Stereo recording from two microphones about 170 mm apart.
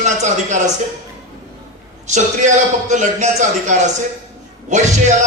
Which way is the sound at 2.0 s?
45° right (ahead or behind).